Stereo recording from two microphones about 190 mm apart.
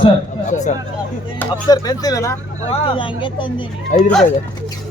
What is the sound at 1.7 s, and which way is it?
Speech, 20° left (ahead or behind).